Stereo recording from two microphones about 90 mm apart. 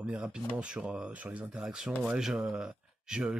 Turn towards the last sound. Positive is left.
turn(degrees=-10)  # may be behind; listen again after turning